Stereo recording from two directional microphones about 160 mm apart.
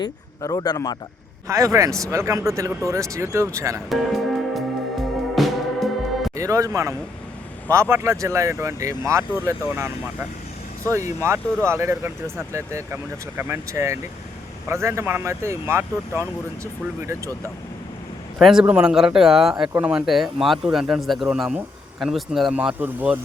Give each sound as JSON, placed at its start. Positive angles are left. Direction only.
{"t": 0.0, "sound": "speech", "side_deg": 25}
{"t": 1.5, "sound": "speech", "side_deg": -20}
{"t": 3.8, "sound": "music", "side_deg": 0}
{"t": 6.3, "sound": "speech", "side_deg": -20}
{"t": 18.3, "sound": "speech", "side_deg": 0}